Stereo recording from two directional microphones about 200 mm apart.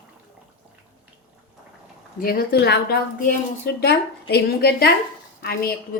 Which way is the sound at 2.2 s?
50° left (ahead or behind).